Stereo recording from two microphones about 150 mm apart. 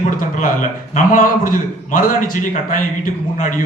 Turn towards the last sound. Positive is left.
turn(degrees=60)  # may be behind; listen again after turning